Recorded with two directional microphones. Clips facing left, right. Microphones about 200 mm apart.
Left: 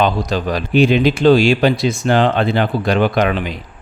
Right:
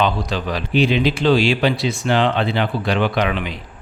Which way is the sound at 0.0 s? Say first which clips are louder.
Left 3 dB; 45° left (ahead or behind).